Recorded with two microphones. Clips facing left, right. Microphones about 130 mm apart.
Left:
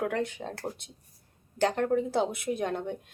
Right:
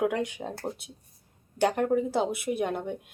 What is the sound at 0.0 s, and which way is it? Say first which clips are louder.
Speech: right 3 dB; 15° right (ahead or behind).